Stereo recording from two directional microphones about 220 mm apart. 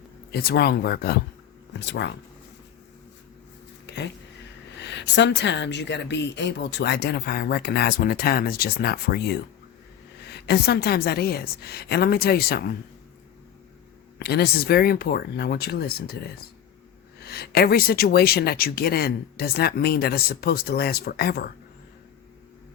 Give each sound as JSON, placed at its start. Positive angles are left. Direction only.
{"t": 0.3, "sound": "speech", "side_deg": 45}
{"t": 3.8, "sound": "a sound", "side_deg": 50}
{"t": 4.8, "sound": "speech", "side_deg": 50}
{"t": 14.2, "sound": "speech", "side_deg": 45}